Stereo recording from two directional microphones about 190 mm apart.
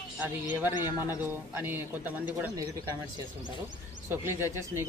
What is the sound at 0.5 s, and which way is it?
Speech, 10° right (ahead or behind).